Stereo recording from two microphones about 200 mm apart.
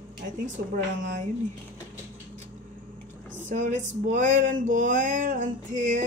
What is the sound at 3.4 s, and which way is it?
Male singing, 35° right (ahead or behind).